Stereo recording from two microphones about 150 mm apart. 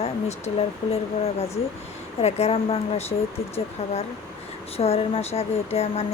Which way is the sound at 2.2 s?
40° left (ahead or behind).